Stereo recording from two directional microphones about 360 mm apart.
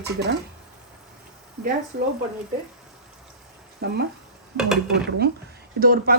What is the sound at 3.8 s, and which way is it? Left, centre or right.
Speech, right.